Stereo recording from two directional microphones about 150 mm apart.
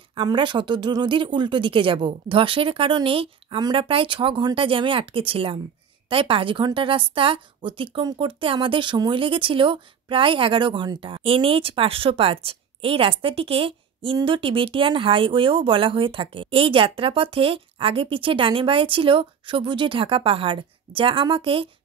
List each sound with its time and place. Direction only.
0.1 s a woman's voice: 35° right (ahead or behind)